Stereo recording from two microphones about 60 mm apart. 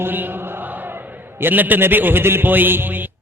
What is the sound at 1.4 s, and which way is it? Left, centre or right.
A man's voice, right.